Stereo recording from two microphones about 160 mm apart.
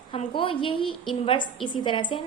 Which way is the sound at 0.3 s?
35° left (ahead or behind).